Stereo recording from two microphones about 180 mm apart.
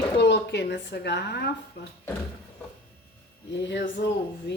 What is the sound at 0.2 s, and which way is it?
Speech, 70° left (ahead or behind).